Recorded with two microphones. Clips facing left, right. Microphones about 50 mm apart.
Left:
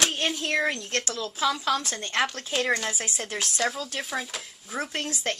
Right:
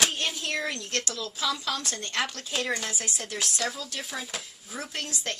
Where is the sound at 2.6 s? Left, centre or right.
Centre.